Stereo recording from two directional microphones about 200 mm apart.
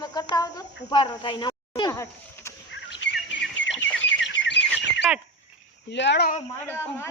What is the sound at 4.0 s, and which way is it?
Bird, 65° left (ahead or behind).